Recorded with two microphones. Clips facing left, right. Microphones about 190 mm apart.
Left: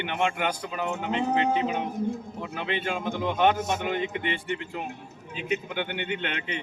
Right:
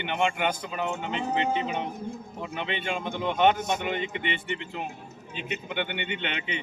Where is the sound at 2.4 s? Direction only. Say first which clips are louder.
Left 1 dB; centre (ahead or behind).